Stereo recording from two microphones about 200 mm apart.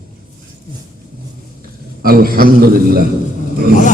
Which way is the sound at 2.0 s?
45° right (ahead or behind).